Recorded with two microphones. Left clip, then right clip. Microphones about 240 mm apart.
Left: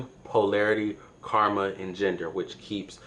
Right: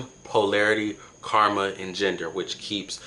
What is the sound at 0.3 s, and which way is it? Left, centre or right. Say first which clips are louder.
Speech: right 2 dB; centre.